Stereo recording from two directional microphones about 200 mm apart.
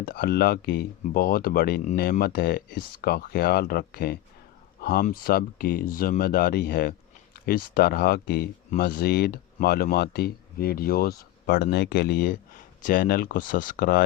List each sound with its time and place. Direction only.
0.0 s speech: 50° left (ahead or behind)